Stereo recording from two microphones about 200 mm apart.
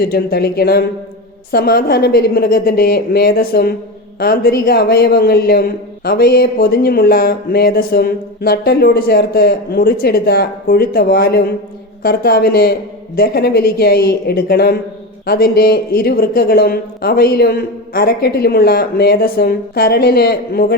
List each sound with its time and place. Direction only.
0.0 s speech: 50° left (ahead or behind)